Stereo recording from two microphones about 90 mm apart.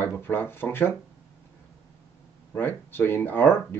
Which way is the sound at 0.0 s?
25° left (ahead or behind).